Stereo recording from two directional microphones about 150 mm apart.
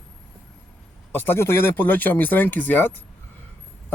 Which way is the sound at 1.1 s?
15° left (ahead or behind).